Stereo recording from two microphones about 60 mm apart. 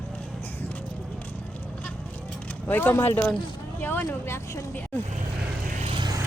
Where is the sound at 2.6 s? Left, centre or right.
Left.